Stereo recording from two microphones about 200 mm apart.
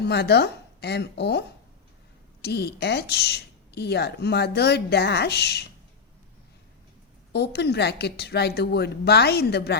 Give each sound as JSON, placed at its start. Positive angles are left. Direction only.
{"t": 0.0, "sound": "speech", "side_deg": 55}
{"t": 7.3, "sound": "speech", "side_deg": 55}